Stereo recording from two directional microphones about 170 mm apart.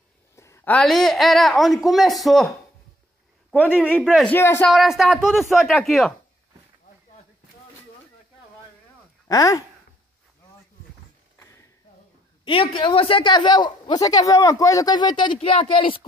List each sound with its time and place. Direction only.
0.4 s speech: 15° left (ahead or behind); by 2.5 s centre (ahead or behind)
4.0 s speech: 5° right (ahead or behind)
4.3 s speech: 15° left (ahead or behind)
4.6 s speech: centre (ahead or behind)
9.3 s speech: 20° left (ahead or behind)
11.3 s a sound: 15° left (ahead or behind)
12.4 s a woman's voice: 30° left (ahead or behind)